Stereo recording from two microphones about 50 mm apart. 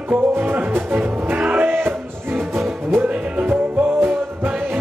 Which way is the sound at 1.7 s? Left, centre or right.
Right.